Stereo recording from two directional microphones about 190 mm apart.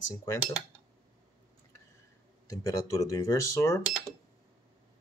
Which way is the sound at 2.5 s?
20° left (ahead or behind).